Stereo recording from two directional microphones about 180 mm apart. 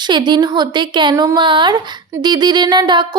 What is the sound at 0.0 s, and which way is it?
A woman's voice, 25° right (ahead or behind).